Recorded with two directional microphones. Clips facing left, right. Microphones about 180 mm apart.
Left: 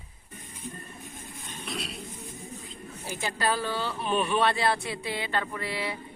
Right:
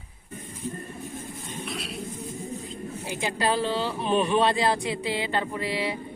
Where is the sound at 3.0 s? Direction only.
15° right (ahead or behind).